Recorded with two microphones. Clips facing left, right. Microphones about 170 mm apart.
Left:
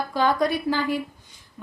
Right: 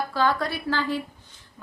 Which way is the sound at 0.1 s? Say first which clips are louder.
Left 5 dB; 15° left (ahead or behind).